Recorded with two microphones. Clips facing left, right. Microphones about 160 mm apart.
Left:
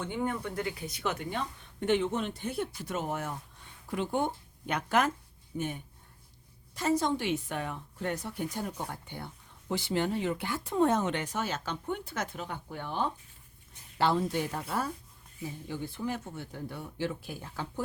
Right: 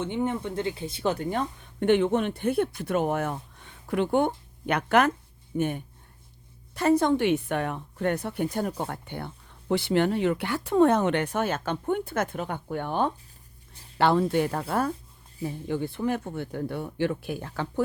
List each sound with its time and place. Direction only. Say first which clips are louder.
0.0 s speech: right 5 dB; 20° right (ahead or behind)
1.3 s speech: right 7 dB; 55° right (ahead or behind)